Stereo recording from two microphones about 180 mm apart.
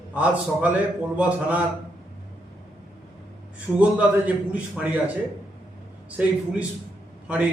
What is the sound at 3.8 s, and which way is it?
A man's voice, 10° right (ahead or behind).